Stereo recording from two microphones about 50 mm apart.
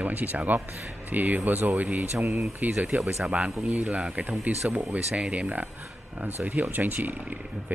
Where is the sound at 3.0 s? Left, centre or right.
Centre.